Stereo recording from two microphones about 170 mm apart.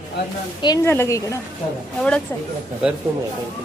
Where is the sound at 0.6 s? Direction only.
20° left (ahead or behind).